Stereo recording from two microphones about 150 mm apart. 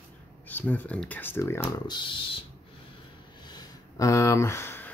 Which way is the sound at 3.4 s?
25° left (ahead or behind).